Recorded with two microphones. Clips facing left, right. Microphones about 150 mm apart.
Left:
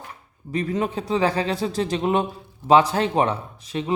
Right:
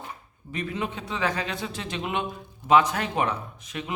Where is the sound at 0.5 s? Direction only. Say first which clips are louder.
Left 7 dB; 40° left (ahead or behind).